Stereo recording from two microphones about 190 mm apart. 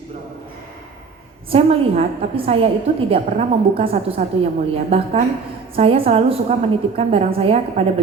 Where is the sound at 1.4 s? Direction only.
30° right (ahead or behind).